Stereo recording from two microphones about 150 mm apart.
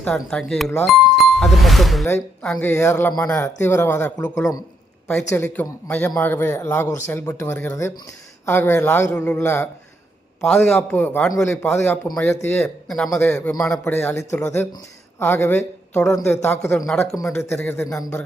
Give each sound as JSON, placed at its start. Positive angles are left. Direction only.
{"t": 0.0, "sound": "a man's voice", "side_deg": 5}
{"t": 12.6, "sound": "speech", "side_deg": 0}
{"t": 13.1, "sound": "a man's voice", "side_deg": 10}
{"t": 17.2, "sound": "a man's voice", "side_deg": 20}